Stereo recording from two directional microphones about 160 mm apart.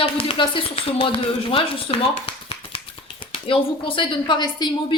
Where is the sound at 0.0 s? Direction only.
35° left (ahead or behind).